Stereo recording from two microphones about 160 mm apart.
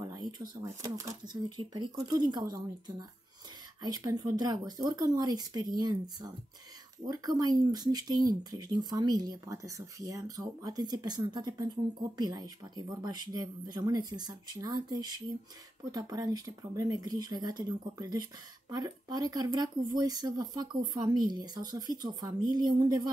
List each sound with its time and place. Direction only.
0.1 s speech: 25° right (ahead or behind)